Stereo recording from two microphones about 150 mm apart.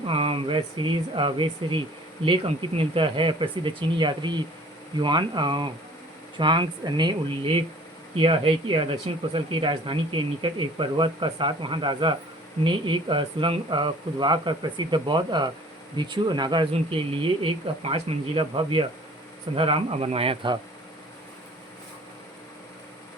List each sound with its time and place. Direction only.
0.1 s speech: 40° right (ahead or behind)